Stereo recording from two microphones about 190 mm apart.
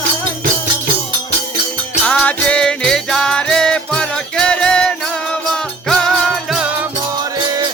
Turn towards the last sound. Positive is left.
turn(degrees=0)  # may be behind; listen again after turning